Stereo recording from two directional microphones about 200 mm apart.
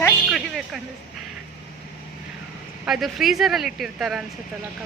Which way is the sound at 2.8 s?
Centre (ahead or behind).